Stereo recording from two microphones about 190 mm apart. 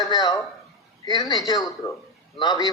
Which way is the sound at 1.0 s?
20° left (ahead or behind).